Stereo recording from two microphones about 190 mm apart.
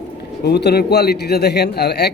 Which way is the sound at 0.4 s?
60° left (ahead or behind).